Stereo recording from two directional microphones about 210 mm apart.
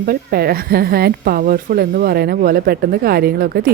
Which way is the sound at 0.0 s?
45° right (ahead or behind).